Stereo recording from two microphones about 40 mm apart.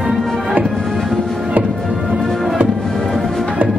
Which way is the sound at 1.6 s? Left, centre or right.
Right.